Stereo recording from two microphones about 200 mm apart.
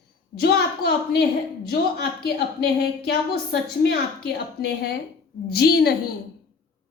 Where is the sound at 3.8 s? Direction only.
50° left (ahead or behind).